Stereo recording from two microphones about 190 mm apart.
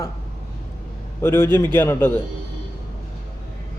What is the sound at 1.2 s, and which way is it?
A man's voice, 10° left (ahead or behind).